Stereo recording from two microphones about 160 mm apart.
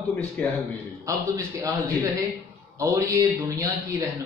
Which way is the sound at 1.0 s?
20° right (ahead or behind).